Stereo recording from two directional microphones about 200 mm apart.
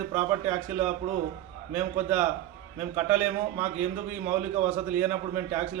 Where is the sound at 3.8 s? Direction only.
40° right (ahead or behind).